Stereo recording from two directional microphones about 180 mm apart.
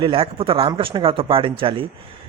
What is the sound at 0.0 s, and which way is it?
Speech, 30° right (ahead or behind).